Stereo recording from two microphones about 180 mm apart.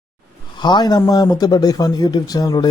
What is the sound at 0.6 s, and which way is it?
A man's voice, 25° left (ahead or behind).